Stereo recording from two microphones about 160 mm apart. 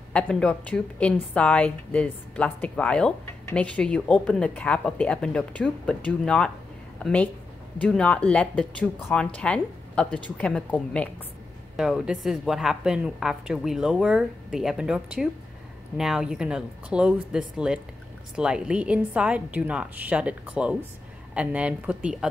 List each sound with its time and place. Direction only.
0.1 s a woman's voice: 5° left (ahead or behind)
11.7 s a woman's voice: 5° right (ahead or behind)